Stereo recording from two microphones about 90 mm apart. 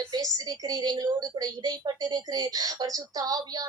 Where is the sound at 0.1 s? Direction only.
45° right (ahead or behind).